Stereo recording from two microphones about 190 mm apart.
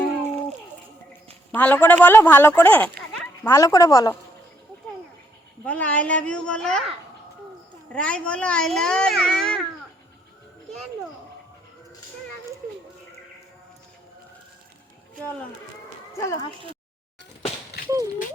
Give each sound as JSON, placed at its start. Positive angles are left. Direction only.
{"t": 1.5, "sound": "speech", "side_deg": 10}
{"t": 5.6, "sound": "speech", "side_deg": 10}
{"t": 7.9, "sound": "a child's voice", "side_deg": 5}
{"t": 16.2, "sound": "speech", "side_deg": 15}
{"t": 17.8, "sound": "a sound", "side_deg": -20}